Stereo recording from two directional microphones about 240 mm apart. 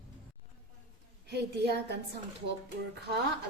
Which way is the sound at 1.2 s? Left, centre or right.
Right.